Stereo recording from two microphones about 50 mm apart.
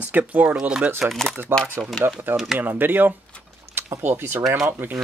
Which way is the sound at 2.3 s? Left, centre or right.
Centre.